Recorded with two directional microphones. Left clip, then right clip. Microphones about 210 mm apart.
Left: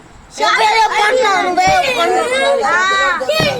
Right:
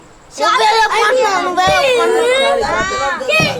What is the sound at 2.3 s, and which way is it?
Speech, 40° right (ahead or behind).